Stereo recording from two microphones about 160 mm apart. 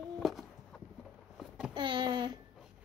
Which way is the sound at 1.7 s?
30° right (ahead or behind).